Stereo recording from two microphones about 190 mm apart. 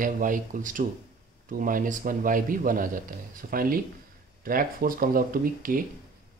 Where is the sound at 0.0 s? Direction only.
45° right (ahead or behind).